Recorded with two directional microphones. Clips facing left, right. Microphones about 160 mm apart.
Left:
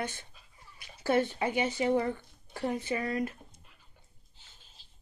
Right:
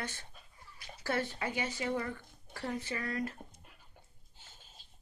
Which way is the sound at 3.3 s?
50° right (ahead or behind).